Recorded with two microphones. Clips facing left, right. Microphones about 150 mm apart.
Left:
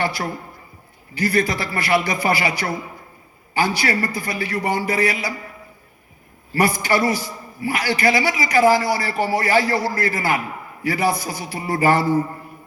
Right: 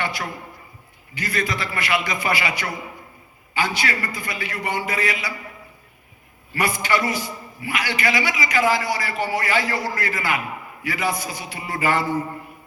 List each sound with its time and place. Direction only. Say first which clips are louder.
0.0 s a sound: left 4 dB; 35° left (ahead or behind)
1.1 s a man's voice: left 6 dB; 35° left (ahead or behind)
6.5 s a man's voice: left 3 dB; 35° left (ahead or behind)